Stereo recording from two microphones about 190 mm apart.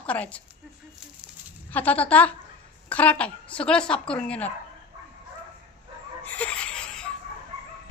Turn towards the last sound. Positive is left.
turn(degrees=5)  # may be behind; listen again after turning